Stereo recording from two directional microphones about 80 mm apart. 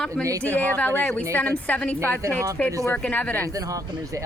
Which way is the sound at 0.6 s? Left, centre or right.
Left.